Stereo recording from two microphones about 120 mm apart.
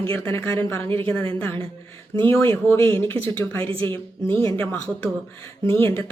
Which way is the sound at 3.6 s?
50° right (ahead or behind).